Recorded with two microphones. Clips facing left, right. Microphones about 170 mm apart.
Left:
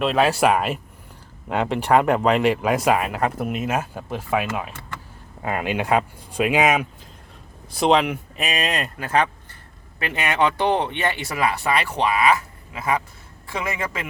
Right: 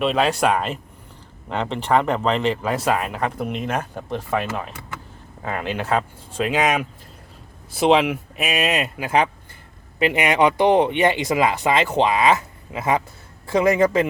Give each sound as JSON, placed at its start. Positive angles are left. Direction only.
{"t": 0.0, "sound": "speech", "side_deg": 0}
{"t": 13.5, "sound": "a man's voice", "side_deg": -35}